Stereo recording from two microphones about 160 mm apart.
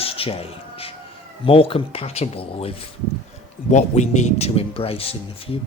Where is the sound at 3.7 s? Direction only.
45° left (ahead or behind).